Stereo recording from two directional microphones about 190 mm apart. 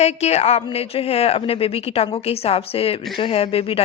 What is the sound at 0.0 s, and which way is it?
Speech, 35° left (ahead or behind).